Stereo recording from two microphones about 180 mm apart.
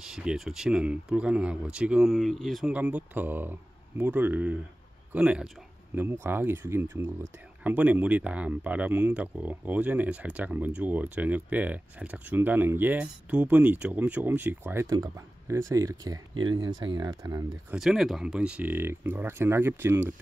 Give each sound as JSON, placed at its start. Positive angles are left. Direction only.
{"t": 0.0, "sound": "speech", "side_deg": -5}
{"t": 17.7, "sound": "speech", "side_deg": 0}